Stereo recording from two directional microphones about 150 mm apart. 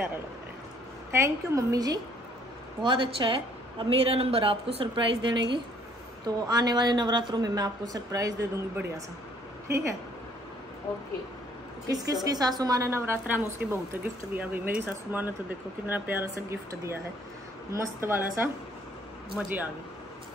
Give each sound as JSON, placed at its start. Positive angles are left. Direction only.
{"t": 1.1, "sound": "a woman's voice", "side_deg": -20}
{"t": 9.7, "sound": "speech", "side_deg": -20}
{"t": 11.9, "sound": "a woman's voice", "side_deg": -25}